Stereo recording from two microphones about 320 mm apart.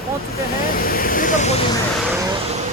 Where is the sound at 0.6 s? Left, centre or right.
Left.